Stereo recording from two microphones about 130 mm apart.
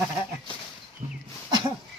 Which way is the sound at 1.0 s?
60° right (ahead or behind).